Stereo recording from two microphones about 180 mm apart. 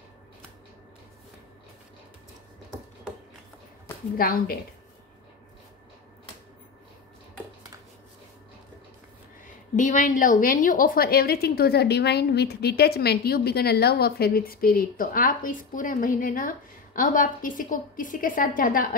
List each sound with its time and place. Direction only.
4.2 s a woman's voice: 55° left (ahead or behind)
9.8 s a woman's voice: 45° left (ahead or behind)